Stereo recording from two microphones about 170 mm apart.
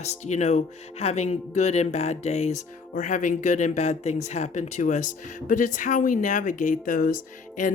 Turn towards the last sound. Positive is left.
turn(degrees=45)  # may be behind; listen again after turning